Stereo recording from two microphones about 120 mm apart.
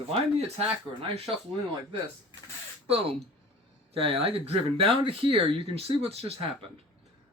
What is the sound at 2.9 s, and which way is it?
A man's voice, 50° right (ahead or behind).